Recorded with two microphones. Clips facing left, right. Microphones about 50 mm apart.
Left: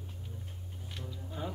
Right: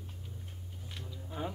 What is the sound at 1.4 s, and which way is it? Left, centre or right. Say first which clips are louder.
Speech: right 1 dB; right.